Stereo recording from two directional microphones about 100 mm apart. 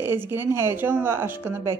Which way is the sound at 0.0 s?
25° right (ahead or behind).